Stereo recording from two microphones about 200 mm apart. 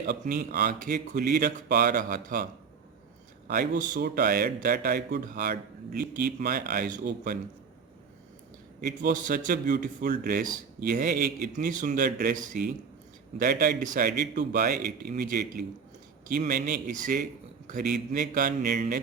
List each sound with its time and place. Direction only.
0.0 s a man's voice: 45° right (ahead or behind)
8.8 s a man's voice: 45° right (ahead or behind)